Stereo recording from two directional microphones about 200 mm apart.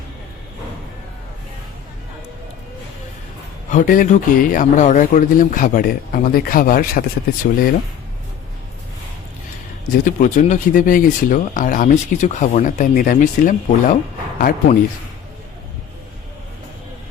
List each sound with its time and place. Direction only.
3.7 s a man's voice: 40° left (ahead or behind)
10.0 s a man's voice: 40° left (ahead or behind)